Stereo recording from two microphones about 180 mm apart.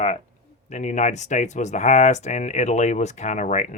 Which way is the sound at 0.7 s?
40° left (ahead or behind).